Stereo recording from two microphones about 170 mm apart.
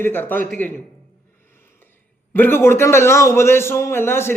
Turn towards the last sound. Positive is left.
turn(degrees=15)  # may be behind; listen again after turning